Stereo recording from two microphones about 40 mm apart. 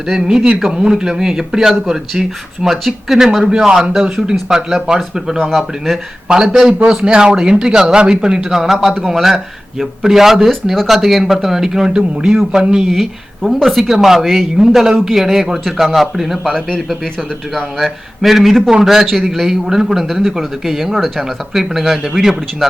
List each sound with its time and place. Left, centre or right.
0.2 s a man's voice: right
4.4 s a man's voice: centre
11.9 s a man's voice: right
12.9 s a man's voice: centre
16.6 s speech: centre
17.7 s a man's voice: centre
18.7 s a man's voice: centre